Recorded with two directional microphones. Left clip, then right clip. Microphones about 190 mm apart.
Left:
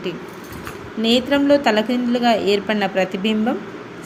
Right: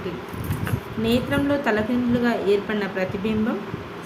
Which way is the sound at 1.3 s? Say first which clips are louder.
Left 6 dB; 25° left (ahead or behind).